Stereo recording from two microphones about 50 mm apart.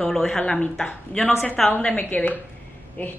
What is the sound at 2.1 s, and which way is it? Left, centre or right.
A woman's voice, left.